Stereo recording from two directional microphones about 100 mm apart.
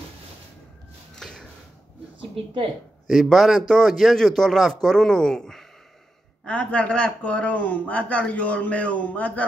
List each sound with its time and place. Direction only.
1.1 s a sound: 5° left (ahead or behind)
2.3 s a woman's voice: 65° right (ahead or behind)
3.1 s a man's voice: centre (ahead or behind)